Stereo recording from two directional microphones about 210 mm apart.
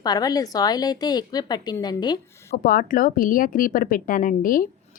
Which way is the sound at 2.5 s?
40° left (ahead or behind).